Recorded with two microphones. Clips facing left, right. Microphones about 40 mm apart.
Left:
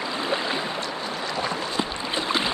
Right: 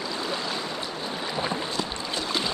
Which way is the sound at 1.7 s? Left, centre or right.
Left.